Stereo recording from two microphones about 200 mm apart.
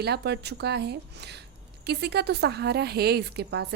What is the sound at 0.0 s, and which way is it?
A woman's voice, 55° right (ahead or behind).